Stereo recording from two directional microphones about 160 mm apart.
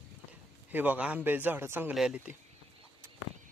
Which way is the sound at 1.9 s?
5° right (ahead or behind).